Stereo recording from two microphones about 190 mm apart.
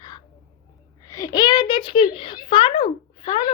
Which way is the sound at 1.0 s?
20° left (ahead or behind).